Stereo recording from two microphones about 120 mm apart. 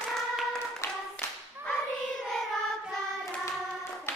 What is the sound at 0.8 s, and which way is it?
Clapping, 25° left (ahead or behind).